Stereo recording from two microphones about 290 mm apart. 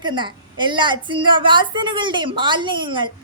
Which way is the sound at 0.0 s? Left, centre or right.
Centre.